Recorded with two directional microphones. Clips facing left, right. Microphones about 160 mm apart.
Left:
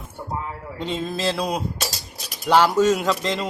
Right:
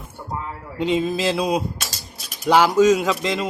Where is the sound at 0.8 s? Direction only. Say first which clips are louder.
Right 6 dB; 10° right (ahead or behind).